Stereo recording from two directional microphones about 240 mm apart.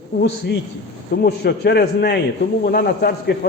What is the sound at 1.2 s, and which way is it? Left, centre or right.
A man's voice, left.